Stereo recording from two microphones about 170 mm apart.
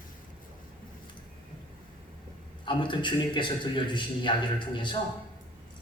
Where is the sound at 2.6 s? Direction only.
30° left (ahead or behind).